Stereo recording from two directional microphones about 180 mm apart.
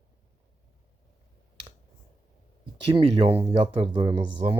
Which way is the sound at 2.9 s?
30° right (ahead or behind).